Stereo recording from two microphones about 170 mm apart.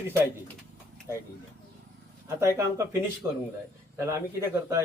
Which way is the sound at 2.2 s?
15° right (ahead or behind).